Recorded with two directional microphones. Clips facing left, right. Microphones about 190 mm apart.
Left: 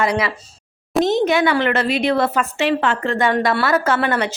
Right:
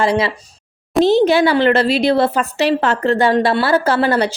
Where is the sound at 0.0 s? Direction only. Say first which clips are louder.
Right 3 dB; 30° right (ahead or behind).